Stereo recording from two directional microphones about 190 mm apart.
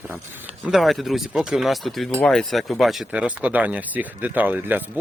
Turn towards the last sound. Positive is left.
turn(degrees=-10)  # may be behind; listen again after turning